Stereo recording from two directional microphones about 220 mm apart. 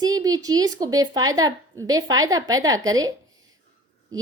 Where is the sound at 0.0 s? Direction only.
15° right (ahead or behind).